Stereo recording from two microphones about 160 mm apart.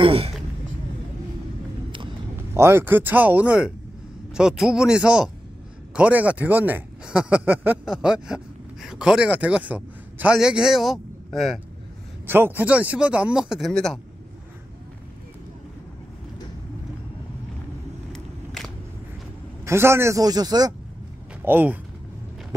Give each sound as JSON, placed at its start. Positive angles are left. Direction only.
{"t": 0.0, "sound": "a sound", "side_deg": -40}
{"t": 2.5, "sound": "a man's voice", "side_deg": -15}
{"t": 12.3, "sound": "speech", "side_deg": -15}
{"t": 18.1, "sound": "a sound", "side_deg": 0}
{"t": 19.6, "sound": "speech", "side_deg": -15}
{"t": 21.5, "sound": "speech", "side_deg": -10}